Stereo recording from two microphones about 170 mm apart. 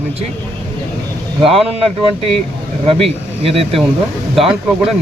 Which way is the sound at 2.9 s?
35° right (ahead or behind).